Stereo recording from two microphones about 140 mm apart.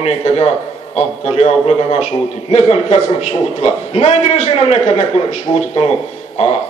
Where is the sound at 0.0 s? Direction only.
50° left (ahead or behind).